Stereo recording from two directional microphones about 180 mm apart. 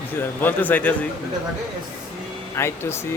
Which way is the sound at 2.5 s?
15° left (ahead or behind).